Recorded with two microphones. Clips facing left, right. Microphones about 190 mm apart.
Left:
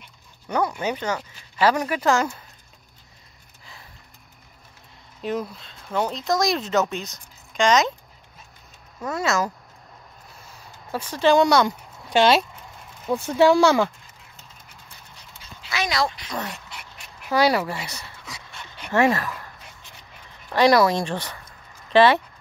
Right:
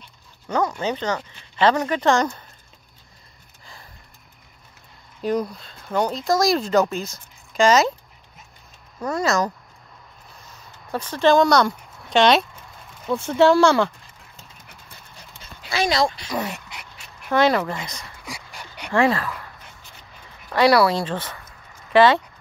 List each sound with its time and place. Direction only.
0.5 s speech: 10° left (ahead or behind)
5.2 s speech: centre (ahead or behind)
9.0 s speech: centre (ahead or behind)
10.9 s speech: 10° left (ahead or behind)
15.7 s speech: 30° right (ahead or behind)
16.3 s speech: 10° right (ahead or behind)
17.3 s speech: 10° left (ahead or behind)
18.9 s speech: 20° left (ahead or behind)
20.5 s speech: 20° left (ahead or behind)